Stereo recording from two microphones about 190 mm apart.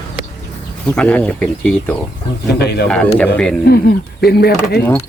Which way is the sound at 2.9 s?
5° left (ahead or behind).